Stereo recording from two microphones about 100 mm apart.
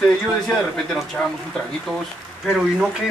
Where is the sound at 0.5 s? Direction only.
5° left (ahead or behind).